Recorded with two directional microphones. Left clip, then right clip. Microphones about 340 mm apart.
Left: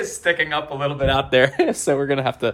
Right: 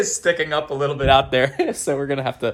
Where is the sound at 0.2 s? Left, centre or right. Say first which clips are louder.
Left 3 dB; centre.